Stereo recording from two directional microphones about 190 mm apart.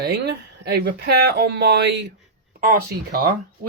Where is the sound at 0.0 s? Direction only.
60° right (ahead or behind).